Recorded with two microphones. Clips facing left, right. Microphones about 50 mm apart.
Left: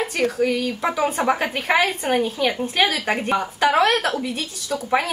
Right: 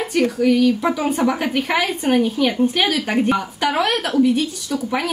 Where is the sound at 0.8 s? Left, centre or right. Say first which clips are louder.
Right 1 dB; centre.